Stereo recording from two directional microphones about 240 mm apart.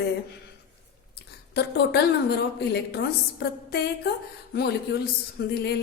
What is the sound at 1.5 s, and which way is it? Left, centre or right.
A woman's voice, left.